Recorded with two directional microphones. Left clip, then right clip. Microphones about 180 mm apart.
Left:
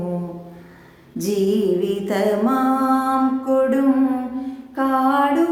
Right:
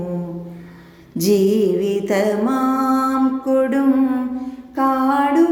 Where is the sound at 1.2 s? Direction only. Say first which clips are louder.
Right 4 dB; 25° right (ahead or behind).